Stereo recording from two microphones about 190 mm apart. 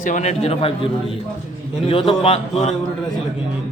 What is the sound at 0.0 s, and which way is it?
Speech, 40° left (ahead or behind).